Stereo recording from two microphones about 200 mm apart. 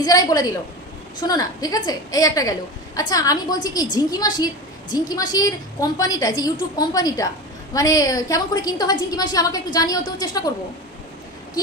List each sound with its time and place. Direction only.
0.0 s a woman's voice: 20° left (ahead or behind)